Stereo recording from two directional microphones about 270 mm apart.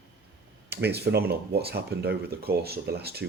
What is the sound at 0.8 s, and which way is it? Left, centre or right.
Speech, right.